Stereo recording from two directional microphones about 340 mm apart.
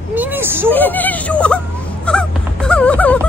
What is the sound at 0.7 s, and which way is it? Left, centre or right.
Speech, centre.